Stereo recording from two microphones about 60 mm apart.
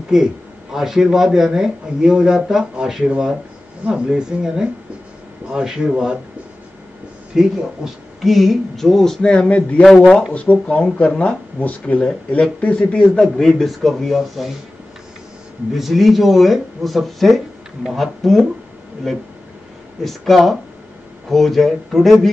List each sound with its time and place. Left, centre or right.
0.1 s speech: centre
7.3 s speech: centre
9.2 s speech: centre
13.4 s speech: centre
15.7 s speech: centre
20.0 s speech: centre